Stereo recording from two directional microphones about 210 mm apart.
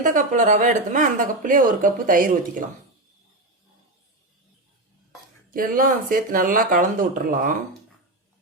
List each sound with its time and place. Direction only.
0.0 s speech: 40° right (ahead or behind)
5.5 s speech: 40° right (ahead or behind)